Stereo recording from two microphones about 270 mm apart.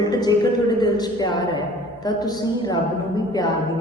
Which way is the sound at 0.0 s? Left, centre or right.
Centre.